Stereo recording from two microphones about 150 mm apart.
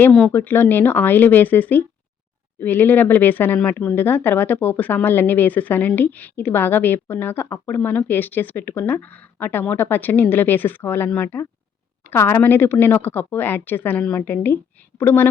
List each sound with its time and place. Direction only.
0.0 s speech: 10° left (ahead or behind)